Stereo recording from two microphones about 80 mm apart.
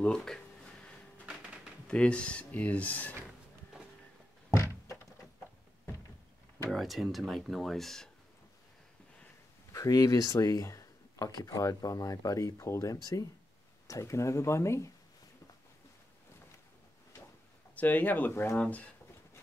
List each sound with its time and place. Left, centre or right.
0.0 s a sound: centre
1.4 s a sound: centre
1.9 s speech: centre
4.5 s thunk: left
6.7 s speech: centre
9.7 s speech: left
17.7 s speech: left